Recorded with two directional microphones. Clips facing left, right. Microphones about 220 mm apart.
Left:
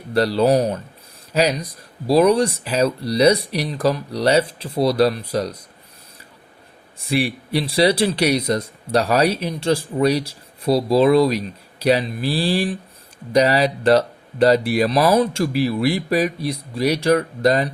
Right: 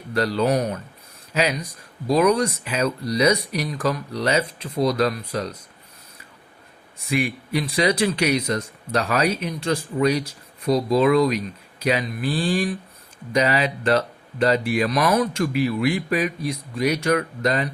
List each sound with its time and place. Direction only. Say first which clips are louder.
0.1 s speech: left 4 dB; 35° left (ahead or behind)
7.1 s speech: left 3 dB; 35° left (ahead or behind)